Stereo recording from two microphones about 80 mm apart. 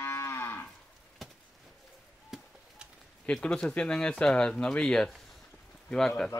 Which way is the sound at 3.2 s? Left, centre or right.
Centre.